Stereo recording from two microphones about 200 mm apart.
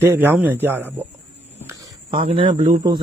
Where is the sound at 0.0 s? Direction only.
10° right (ahead or behind).